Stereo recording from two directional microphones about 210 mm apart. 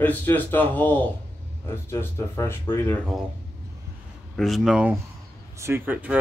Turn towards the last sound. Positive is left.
turn(degrees=-10)  # may be behind; listen again after turning